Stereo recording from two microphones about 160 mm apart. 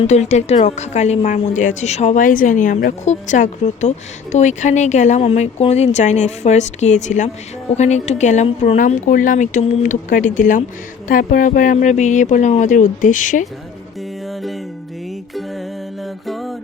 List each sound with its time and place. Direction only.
0.0 s speech: 45° left (ahead or behind)
16.2 s music: centre (ahead or behind)